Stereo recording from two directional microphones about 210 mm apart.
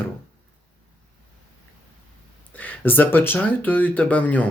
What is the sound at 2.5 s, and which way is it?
Speech, 10° left (ahead or behind).